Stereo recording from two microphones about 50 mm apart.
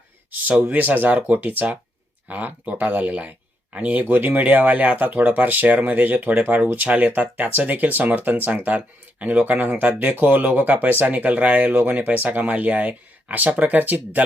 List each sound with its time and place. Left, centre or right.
0.7 s speech: right
11.7 s speech: right
11.9 s speech: right